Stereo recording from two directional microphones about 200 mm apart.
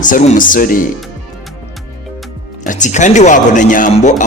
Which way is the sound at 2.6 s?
40° left (ahead or behind).